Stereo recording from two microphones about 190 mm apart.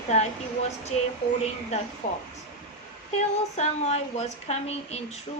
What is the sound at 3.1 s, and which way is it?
Speech, 35° left (ahead or behind).